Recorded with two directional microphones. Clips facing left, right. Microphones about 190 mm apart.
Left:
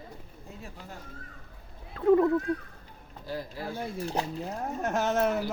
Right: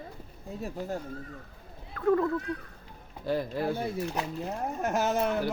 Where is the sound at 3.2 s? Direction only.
60° right (ahead or behind).